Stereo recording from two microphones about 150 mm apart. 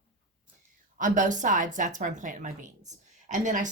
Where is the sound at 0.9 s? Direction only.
60° right (ahead or behind).